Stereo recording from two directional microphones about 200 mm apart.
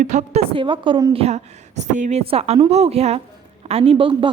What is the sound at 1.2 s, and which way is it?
A woman's voice, 35° right (ahead or behind).